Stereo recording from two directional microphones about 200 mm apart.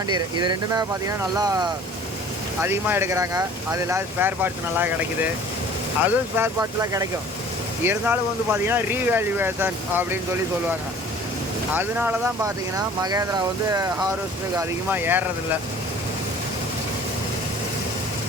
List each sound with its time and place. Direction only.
0.1 s speech: 20° right (ahead or behind)
11.7 s speech: 10° right (ahead or behind)